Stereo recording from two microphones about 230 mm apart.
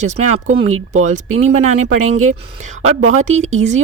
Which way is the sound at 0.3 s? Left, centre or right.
Right.